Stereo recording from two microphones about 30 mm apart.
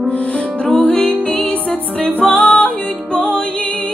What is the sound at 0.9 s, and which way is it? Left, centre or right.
Music, left.